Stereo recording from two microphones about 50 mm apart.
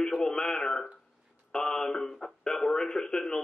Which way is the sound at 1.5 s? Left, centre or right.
Centre.